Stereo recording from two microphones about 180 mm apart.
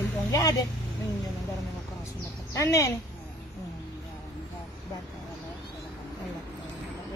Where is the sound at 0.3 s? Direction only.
20° left (ahead or behind).